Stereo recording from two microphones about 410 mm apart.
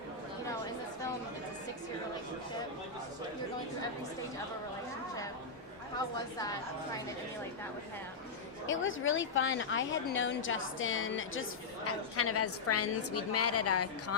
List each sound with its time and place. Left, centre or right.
8.6 s a woman's voice: left